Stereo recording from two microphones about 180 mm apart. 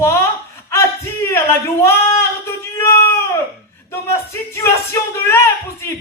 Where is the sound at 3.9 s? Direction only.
15° left (ahead or behind).